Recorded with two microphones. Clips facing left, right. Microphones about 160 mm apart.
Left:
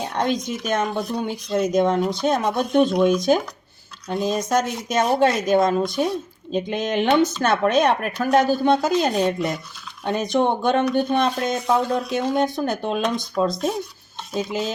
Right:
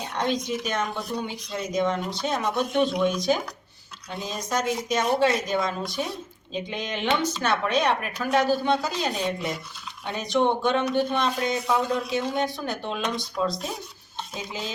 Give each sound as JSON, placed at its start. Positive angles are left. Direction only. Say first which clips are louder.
{"t": 0.2, "sound": "speech", "louder": "left 2 dB", "side_deg": 50}